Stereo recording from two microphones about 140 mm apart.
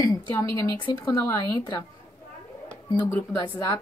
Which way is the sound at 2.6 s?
15° left (ahead or behind).